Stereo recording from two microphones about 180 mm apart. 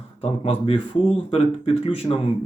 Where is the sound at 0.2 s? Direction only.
30° left (ahead or behind).